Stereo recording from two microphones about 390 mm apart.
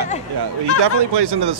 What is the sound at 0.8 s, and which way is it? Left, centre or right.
Speech, right.